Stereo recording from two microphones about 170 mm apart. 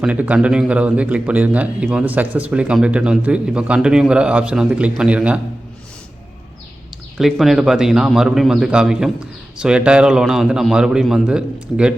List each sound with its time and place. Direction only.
0.0 s a man's voice: 10° right (ahead or behind)
7.2 s a man's voice: centre (ahead or behind)